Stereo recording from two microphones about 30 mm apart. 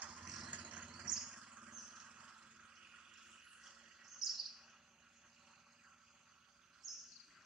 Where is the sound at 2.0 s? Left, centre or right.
Right; by 4.7 s centre.